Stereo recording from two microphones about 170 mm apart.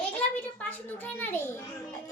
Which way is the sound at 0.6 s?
10° left (ahead or behind).